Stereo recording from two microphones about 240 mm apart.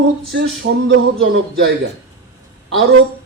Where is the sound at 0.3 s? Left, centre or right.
Right.